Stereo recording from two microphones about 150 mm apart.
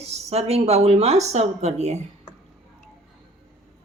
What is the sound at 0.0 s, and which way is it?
Speech, 45° right (ahead or behind).